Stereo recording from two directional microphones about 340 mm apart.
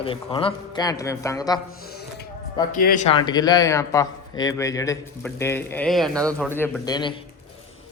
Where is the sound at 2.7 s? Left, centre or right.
Left.